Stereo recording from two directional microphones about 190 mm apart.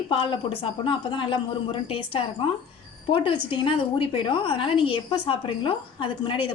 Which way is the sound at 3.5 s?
25° left (ahead or behind).